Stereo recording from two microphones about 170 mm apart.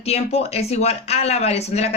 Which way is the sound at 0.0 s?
35° left (ahead or behind).